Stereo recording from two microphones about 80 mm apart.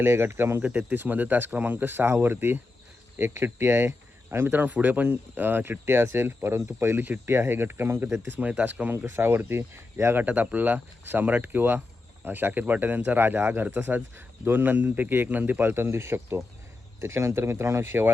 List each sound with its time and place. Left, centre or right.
0.0 s speech: right
8.4 s speech: centre